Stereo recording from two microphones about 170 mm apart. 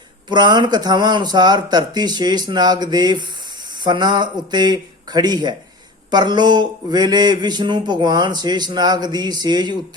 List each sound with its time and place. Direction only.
0.3 s speech: 25° right (ahead or behind)